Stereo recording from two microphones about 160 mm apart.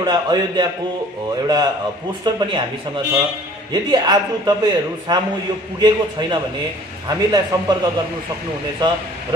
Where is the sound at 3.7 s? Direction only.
25° right (ahead or behind).